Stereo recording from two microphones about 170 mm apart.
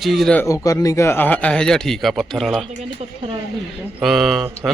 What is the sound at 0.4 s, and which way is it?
Speech, 20° left (ahead or behind).